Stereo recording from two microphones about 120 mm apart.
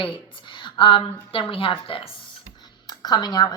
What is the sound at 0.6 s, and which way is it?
A woman's voice, 45° left (ahead or behind).